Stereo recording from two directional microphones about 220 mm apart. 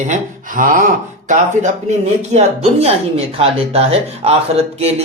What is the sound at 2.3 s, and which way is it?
A man's voice, 30° right (ahead or behind).